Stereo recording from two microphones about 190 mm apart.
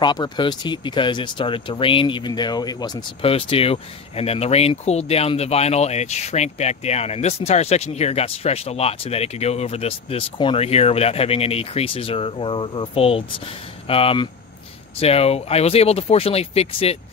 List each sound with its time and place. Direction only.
0.0 s speech: 25° left (ahead or behind)